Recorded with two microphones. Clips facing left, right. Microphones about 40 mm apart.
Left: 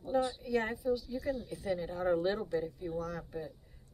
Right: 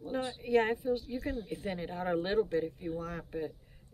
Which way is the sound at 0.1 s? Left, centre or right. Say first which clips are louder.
Right 1 dB; right.